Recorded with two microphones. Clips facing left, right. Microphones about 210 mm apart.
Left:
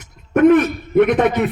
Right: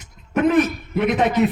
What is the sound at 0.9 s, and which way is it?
Speech, 60° left (ahead or behind).